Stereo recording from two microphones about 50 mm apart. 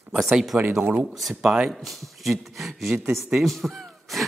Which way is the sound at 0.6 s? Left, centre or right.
Right.